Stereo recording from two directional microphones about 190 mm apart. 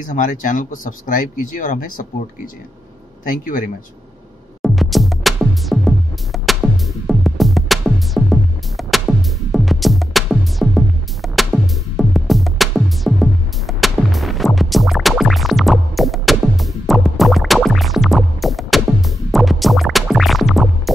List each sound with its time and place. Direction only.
0.0 s speech: 45° left (ahead or behind)
3.3 s speech: 45° left (ahead or behind)
4.6 s music: centre (ahead or behind)